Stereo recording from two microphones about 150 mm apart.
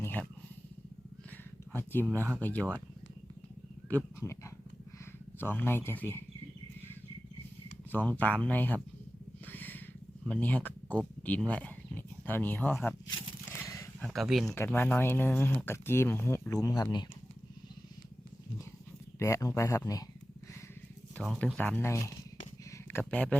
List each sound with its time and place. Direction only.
0.0 s a sound: 10° left (ahead or behind)
1.7 s a sound: 15° left (ahead or behind)
2.4 s speech: 10° left (ahead or behind)
3.8 s speech: 15° left (ahead or behind)
8.2 s speech: 10° left (ahead or behind)
9.5 s a sound: 10° left (ahead or behind)
10.2 s speech: 10° left (ahead or behind)
13.5 s a sound: 20° left (ahead or behind)
14.0 s speech: centre (ahead or behind)
14.5 s speech: 15° left (ahead or behind)
19.2 s speech: 20° left (ahead or behind)
21.2 s speech: 10° left (ahead or behind)